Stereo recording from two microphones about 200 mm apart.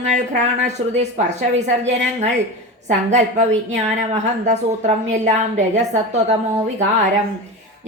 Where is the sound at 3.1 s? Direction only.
35° right (ahead or behind).